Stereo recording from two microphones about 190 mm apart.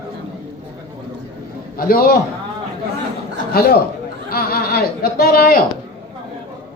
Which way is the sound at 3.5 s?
55° left (ahead or behind).